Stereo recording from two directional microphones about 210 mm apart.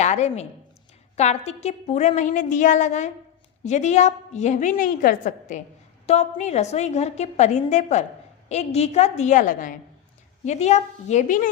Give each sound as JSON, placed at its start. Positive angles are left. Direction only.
{"t": 0.0, "sound": "a woman's voice", "side_deg": 35}